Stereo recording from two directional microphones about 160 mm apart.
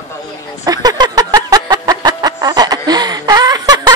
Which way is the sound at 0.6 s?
25° right (ahead or behind).